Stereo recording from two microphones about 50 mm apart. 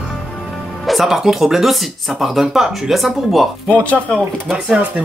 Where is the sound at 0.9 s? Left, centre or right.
Centre.